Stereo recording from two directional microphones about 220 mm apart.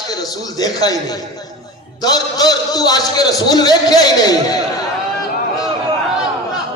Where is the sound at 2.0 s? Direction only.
20° left (ahead or behind).